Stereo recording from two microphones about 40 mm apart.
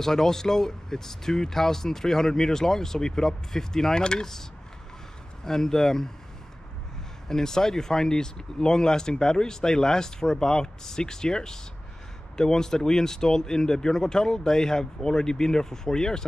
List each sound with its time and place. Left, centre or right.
0.0 s speech: centre
5.4 s speech: centre
7.2 s speech: centre